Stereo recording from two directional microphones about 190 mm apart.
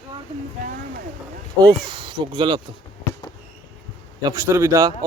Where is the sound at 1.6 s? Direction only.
25° right (ahead or behind).